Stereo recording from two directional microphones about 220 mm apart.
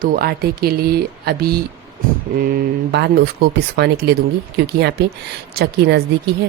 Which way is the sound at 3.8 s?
50° right (ahead or behind).